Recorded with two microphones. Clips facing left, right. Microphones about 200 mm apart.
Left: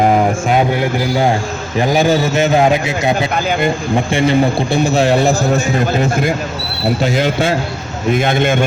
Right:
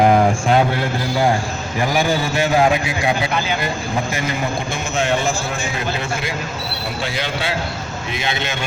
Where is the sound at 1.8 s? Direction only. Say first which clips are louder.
Left 6 dB; 20° left (ahead or behind).